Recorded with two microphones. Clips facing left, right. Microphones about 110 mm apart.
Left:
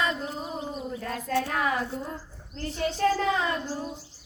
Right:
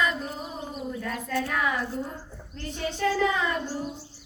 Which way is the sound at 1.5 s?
35° left (ahead or behind).